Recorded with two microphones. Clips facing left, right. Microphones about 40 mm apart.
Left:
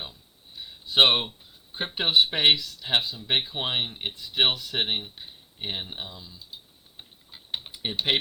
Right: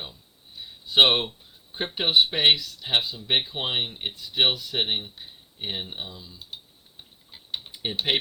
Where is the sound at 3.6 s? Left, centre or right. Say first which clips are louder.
Right 1 dB; centre.